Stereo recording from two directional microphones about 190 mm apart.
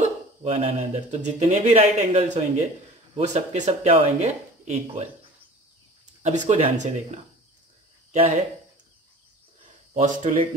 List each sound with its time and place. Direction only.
0.0 s speech: 35° right (ahead or behind)
6.2 s speech: 35° right (ahead or behind)
9.9 s speech: 35° right (ahead or behind)